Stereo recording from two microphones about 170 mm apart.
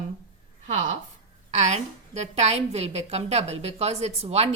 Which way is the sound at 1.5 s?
40° right (ahead or behind).